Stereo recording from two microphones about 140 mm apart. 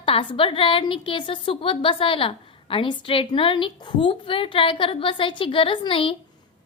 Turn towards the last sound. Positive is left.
turn(degrees=40)  # may be behind; listen again after turning